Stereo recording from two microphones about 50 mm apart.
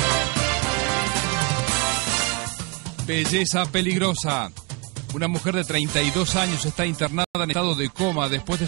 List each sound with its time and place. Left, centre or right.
0.0 s music: right
3.1 s speech: right